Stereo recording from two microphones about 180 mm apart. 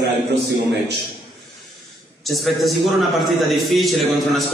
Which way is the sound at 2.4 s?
Centre (ahead or behind).